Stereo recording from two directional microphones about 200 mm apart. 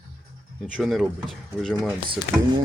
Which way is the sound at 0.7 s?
Centre (ahead or behind).